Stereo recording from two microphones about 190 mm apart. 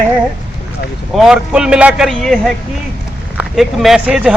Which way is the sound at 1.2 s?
5° right (ahead or behind).